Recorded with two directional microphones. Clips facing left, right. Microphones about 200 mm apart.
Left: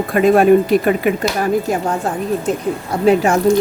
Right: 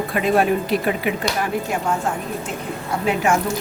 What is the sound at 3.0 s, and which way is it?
Speech, 35° left (ahead or behind).